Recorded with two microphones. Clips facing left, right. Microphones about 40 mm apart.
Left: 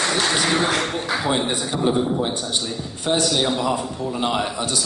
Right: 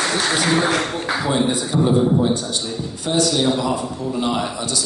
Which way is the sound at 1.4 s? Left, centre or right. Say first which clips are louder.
Right 3 dB; left.